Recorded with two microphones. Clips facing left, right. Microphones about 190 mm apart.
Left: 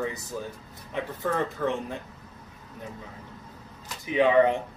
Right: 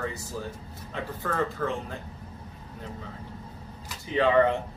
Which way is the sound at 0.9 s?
20° left (ahead or behind).